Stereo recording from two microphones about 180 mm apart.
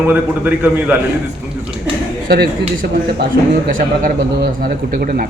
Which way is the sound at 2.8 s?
55° right (ahead or behind).